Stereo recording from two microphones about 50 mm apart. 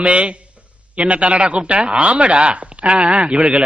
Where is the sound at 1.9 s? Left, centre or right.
Right.